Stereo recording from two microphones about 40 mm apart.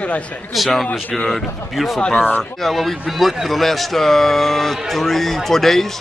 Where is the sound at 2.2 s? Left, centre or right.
Left.